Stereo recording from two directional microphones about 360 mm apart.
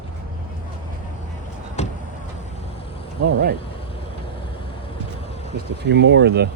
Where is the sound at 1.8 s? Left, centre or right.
Centre.